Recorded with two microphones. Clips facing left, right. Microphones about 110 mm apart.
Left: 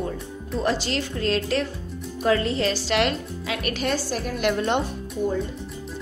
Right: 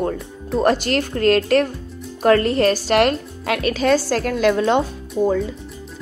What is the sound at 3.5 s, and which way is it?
A woman's voice, 90° right.